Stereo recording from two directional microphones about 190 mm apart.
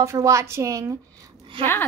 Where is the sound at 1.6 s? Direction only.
10° left (ahead or behind).